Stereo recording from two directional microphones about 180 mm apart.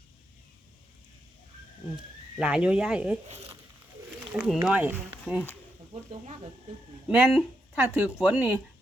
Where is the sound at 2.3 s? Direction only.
5° right (ahead or behind).